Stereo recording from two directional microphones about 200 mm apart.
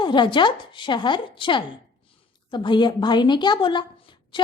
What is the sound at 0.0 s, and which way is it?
A woman's voice, 25° left (ahead or behind).